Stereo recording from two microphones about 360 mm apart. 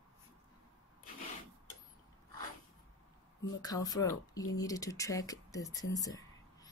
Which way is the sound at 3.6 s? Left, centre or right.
Centre.